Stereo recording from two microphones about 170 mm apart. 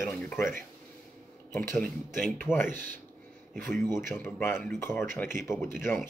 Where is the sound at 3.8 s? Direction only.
15° left (ahead or behind).